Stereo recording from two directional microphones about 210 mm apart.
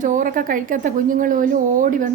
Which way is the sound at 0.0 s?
40° right (ahead or behind).